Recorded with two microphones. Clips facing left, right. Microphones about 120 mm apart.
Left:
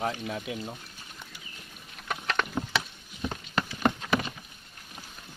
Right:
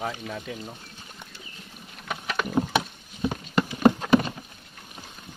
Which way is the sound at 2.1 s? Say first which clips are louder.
Right 3 dB; 5° right (ahead or behind).